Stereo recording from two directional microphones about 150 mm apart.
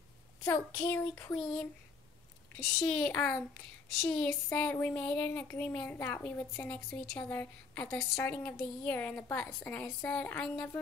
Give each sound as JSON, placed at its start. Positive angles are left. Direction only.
{"t": 0.5, "sound": "speech", "side_deg": 15}
{"t": 1.3, "sound": "speech", "side_deg": 5}